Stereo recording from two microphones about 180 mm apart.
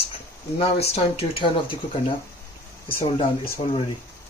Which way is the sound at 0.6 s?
35° left (ahead or behind).